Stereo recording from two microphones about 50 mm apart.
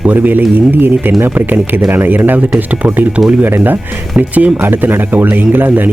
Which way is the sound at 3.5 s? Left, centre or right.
Right.